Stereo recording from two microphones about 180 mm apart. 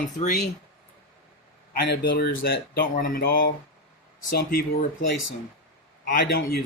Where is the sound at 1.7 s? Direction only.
60° left (ahead or behind).